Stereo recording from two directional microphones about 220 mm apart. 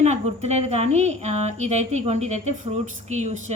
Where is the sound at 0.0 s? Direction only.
30° right (ahead or behind).